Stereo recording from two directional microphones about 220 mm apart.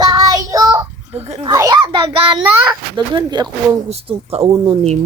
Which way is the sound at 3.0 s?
20° right (ahead or behind).